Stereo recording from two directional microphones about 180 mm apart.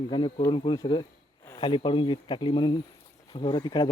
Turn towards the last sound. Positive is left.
turn(degrees=25)  # may be behind; listen again after turning